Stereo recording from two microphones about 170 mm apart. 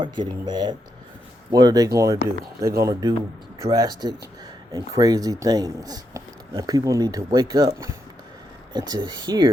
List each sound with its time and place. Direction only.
0.0 s speech: 25° right (ahead or behind)